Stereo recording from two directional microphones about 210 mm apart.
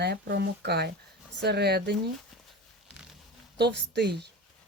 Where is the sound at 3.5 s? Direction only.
55° right (ahead or behind).